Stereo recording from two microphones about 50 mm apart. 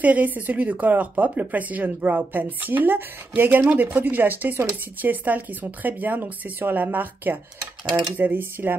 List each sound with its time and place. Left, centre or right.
0.0 s a woman's voice: right